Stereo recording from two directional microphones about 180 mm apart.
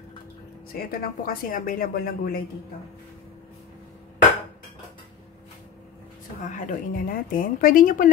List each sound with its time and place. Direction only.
0.7 s a woman's voice: 55° left (ahead or behind)
6.4 s a woman's voice: 45° left (ahead or behind)